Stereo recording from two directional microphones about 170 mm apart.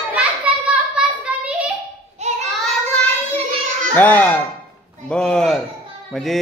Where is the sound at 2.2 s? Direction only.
40° right (ahead or behind).